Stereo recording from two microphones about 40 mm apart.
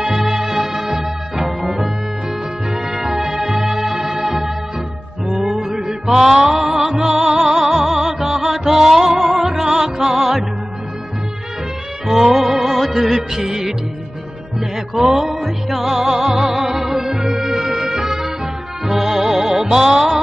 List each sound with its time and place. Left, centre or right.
0.0 s music: centre
12.1 s music: centre